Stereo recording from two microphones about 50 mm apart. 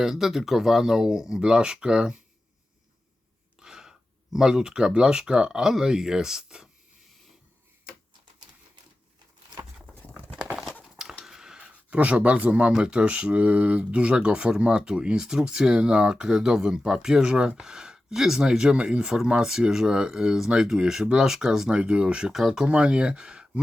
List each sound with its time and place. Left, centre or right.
0.0 s speech: centre
3.6 s speech: centre
10.3 s horse: centre
11.3 s speech: centre
21.8 s speech: right
22.3 s speech: centre
22.6 s speech: right